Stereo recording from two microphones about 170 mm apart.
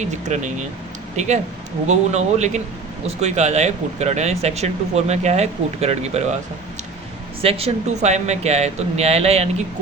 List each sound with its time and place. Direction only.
0.0 s speech: 45° right (ahead or behind)
7.4 s speech: 35° right (ahead or behind)